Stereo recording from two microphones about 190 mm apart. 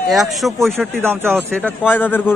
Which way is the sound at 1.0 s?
10° right (ahead or behind).